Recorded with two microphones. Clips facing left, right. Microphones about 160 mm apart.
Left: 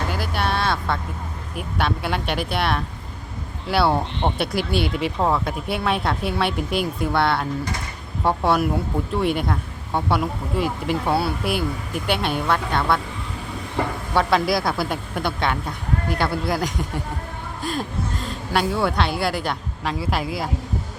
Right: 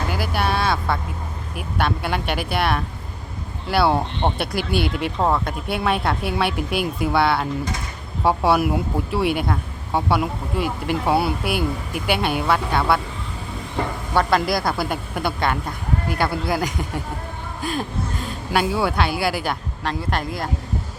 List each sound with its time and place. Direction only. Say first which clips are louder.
0.1 s speech: right 1 dB; centre (ahead or behind)
11.1 s speech: right 3 dB; 15° right (ahead or behind)
11.4 s speech: right 1 dB; centre (ahead or behind)
14.1 s speech: even; centre (ahead or behind)